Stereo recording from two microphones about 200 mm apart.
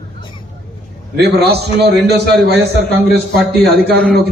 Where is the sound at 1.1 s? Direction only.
55° right (ahead or behind).